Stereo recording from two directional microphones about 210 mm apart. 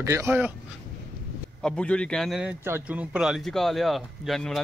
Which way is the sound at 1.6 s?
5° left (ahead or behind).